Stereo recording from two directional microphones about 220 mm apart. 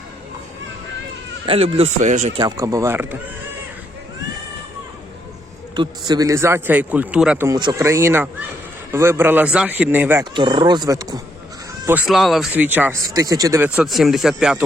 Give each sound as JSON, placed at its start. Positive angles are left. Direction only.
{"t": 1.5, "sound": "speech", "side_deg": -25}
{"t": 2.4, "sound": "a man's voice", "side_deg": -15}
{"t": 5.7, "sound": "a man's voice", "side_deg": -20}
{"t": 10.3, "sound": "speech", "side_deg": -20}
{"t": 11.9, "sound": "a man's voice", "side_deg": -5}
{"t": 13.7, "sound": "speech", "side_deg": 0}